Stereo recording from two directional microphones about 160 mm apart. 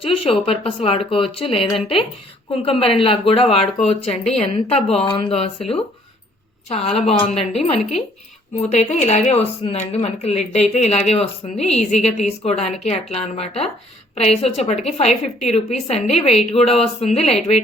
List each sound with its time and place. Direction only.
0.0 s speech: 35° left (ahead or behind)